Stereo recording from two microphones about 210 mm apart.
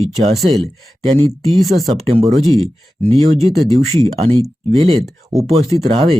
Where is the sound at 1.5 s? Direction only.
Centre (ahead or behind).